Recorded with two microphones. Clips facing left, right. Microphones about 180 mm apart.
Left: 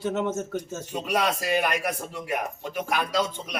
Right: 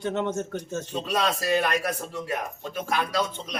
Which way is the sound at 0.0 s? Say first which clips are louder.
Even; 5° left (ahead or behind).